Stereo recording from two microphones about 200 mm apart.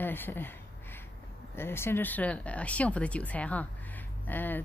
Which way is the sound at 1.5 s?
10° left (ahead or behind).